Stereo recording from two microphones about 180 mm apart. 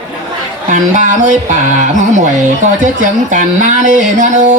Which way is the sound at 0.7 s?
45° right (ahead or behind).